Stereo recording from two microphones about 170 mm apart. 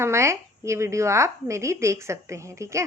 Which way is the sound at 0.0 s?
15° right (ahead or behind).